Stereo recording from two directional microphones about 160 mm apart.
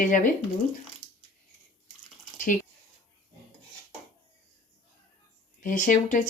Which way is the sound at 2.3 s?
55° left (ahead or behind).